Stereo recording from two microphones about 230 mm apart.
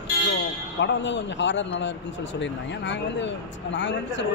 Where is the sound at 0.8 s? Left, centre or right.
Left.